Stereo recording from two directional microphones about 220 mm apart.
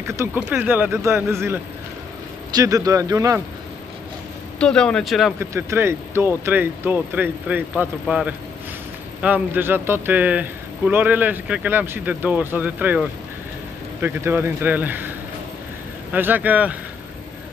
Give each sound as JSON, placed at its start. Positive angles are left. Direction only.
{"t": 0.0, "sound": "a man's voice", "side_deg": -15}
{"t": 4.6, "sound": "speech", "side_deg": 5}
{"t": 5.4, "sound": "a man's voice", "side_deg": -10}